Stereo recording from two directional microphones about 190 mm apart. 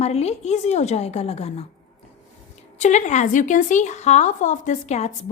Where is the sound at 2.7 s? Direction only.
40° left (ahead or behind).